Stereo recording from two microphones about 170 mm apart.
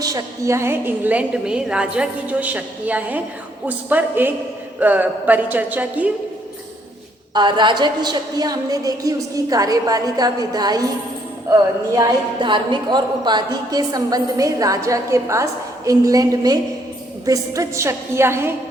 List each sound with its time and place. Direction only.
0.0 s a woman's voice: 20° right (ahead or behind)
7.3 s a woman's voice: 25° right (ahead or behind)
11.9 s a woman's voice: 25° right (ahead or behind)